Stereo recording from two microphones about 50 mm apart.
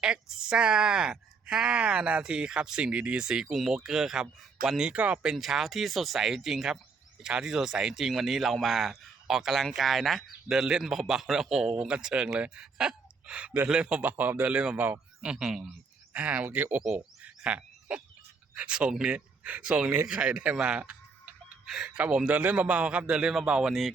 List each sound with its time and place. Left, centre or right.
0.0 s a man's voice: centre
3.4 s speech: centre
4.9 s a man's voice: right
5.2 s speech: centre
13.3 s a man's voice: right
14.0 s a man's voice: right
15.2 s a man's voice: centre
16.6 s a man's voice: right
17.2 s frog: right
18.5 s speech: right
18.9 s speech: centre
19.5 s a man's voice: right
22.0 s a man's voice: right; by 23.7 s centre